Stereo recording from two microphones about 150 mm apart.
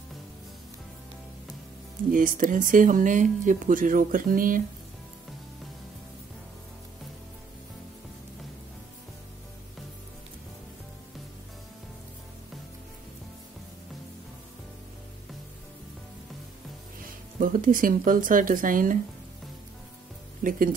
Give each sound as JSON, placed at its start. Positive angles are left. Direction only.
{"t": 2.0, "sound": "speech", "side_deg": -65}
{"t": 17.0, "sound": "speech", "side_deg": -70}
{"t": 20.4, "sound": "speech", "side_deg": -65}